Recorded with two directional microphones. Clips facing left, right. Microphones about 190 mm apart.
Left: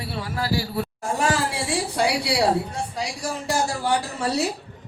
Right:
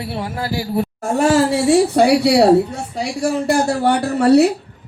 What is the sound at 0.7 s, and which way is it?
Speech, 65° right (ahead or behind).